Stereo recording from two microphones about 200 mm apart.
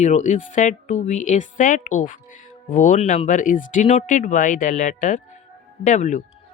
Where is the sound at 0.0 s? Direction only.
35° left (ahead or behind).